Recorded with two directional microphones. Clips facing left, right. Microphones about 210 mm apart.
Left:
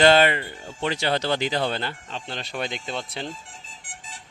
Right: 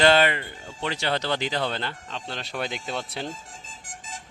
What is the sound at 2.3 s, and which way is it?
Speech, centre (ahead or behind).